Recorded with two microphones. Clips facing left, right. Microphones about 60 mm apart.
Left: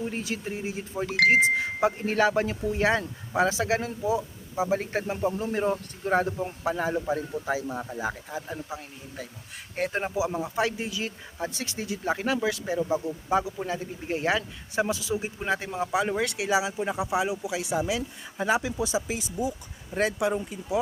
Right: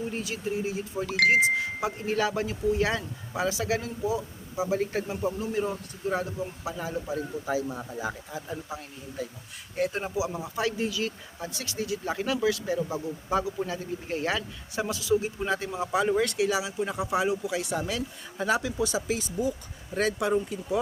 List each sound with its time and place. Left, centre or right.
0.1 s speech: left; by 20.7 s centre